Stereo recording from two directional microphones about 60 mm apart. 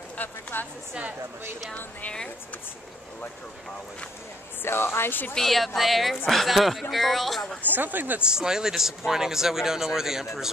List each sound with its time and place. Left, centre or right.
0.2 s a woman's voice: left
1.8 s a woman's voice: left
4.6 s speech: left
5.3 s speech: centre
7.6 s speech: right
8.2 s speech: centre